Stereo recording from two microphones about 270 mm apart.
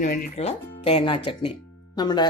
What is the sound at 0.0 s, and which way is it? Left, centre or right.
Speech, left.